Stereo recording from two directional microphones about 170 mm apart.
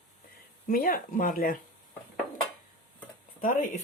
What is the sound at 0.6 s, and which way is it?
Speech, 55° left (ahead or behind).